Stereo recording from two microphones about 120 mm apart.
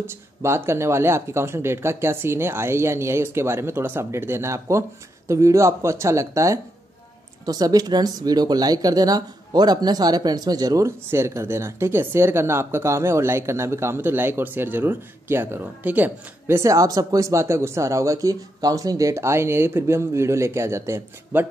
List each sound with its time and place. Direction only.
0.0 s speech: 20° right (ahead or behind)